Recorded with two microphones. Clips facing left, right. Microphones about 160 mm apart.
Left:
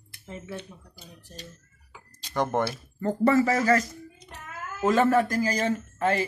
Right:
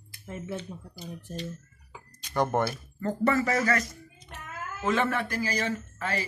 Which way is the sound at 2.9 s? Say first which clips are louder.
Left 4 dB; 25° left (ahead or behind).